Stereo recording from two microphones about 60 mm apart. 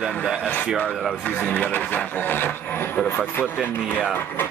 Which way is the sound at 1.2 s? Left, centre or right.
Left.